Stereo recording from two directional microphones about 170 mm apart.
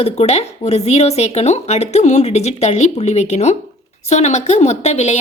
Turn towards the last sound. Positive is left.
turn(degrees=40)  # may be behind; listen again after turning